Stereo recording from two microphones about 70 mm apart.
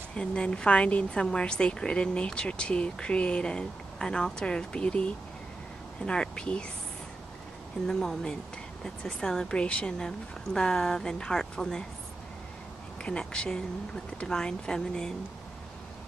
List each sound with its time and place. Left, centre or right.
0.1 s a woman's voice: centre
7.8 s a woman's voice: centre
13.0 s a woman's voice: centre